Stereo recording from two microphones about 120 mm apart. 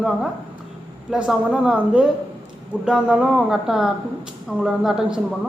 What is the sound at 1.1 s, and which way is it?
A woman's voice, 5° right (ahead or behind).